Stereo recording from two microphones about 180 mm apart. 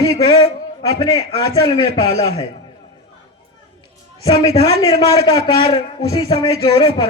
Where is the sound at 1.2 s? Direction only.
30° left (ahead or behind).